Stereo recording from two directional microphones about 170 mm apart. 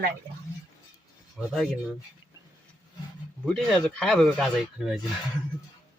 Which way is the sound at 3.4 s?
5° left (ahead or behind).